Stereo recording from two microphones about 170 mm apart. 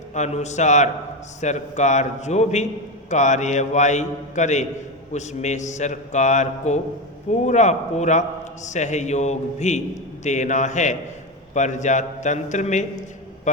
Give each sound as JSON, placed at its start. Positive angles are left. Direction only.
{"t": 0.1, "sound": "a man's voice", "side_deg": 45}